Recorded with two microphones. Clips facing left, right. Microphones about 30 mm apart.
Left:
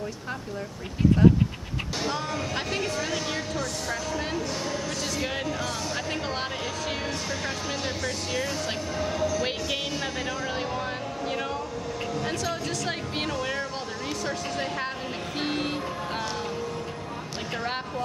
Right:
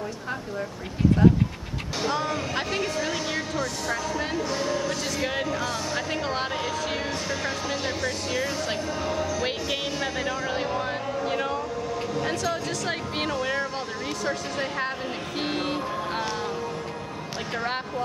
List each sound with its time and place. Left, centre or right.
2.0 s speech: centre
15.3 s music: centre
17.6 s speech: centre